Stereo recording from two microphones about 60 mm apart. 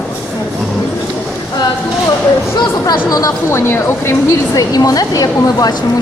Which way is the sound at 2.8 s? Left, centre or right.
Left.